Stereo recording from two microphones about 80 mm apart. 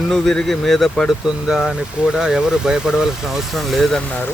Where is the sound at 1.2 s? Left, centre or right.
Centre.